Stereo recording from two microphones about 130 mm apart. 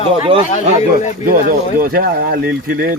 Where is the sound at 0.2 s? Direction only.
40° right (ahead or behind).